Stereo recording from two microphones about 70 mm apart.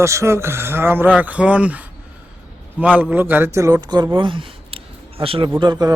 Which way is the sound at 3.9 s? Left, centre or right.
Right.